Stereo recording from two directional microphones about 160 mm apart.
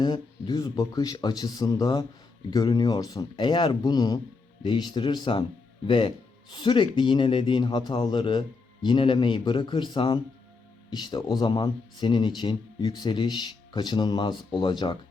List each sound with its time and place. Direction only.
0.0 s speech: 25° left (ahead or behind)